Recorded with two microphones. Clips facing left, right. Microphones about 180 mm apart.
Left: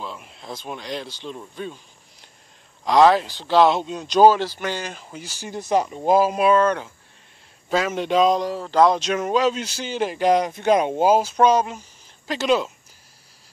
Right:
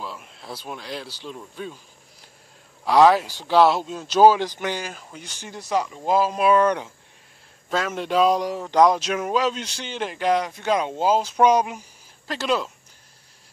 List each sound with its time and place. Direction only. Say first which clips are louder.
0.2 s speech: left 2 dB; 5° right (ahead or behind)
2.8 s speech: even; 10° right (ahead or behind)
4.8 s speech: left 2 dB; centre (ahead or behind)
5.6 s speech: left 3 dB; 50° left (ahead or behind)
6.5 s speech: even; 15° right (ahead or behind)
7.7 s speech: left 2 dB; 5° left (ahead or behind); by 8.9 s 15° right (ahead or behind)
8.9 s speech: left 2 dB; 5° right (ahead or behind); by 10.4 s 15° left (ahead or behind)
10.6 s speech: left 5 dB; 50° left (ahead or behind)
10.9 s speech: left 3 dB; 10° left (ahead or behind)
11.3 s speech: even; 15° right (ahead or behind)
12.3 s speech: left 4 dB; centre (ahead or behind)